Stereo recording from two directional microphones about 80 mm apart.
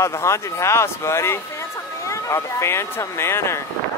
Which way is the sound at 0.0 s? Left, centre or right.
Left.